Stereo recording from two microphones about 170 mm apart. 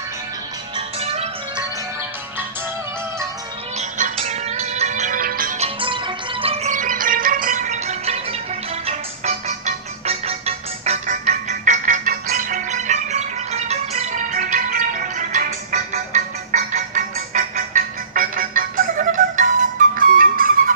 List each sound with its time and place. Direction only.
3.7 s music: 40° right (ahead or behind); by 5.6 s 55° right (ahead or behind)
5.6 s music: 30° right (ahead or behind)
11.1 s music: 50° right (ahead or behind)
14.3 s music: 55° right (ahead or behind)